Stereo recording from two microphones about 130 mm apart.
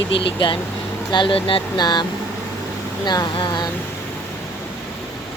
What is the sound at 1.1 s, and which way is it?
Speech, 40° left (ahead or behind).